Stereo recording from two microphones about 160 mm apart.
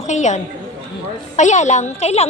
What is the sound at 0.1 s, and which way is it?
A woman's voice, 50° left (ahead or behind).